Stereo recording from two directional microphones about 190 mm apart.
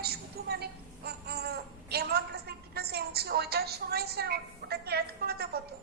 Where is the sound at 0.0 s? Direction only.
55° right (ahead or behind).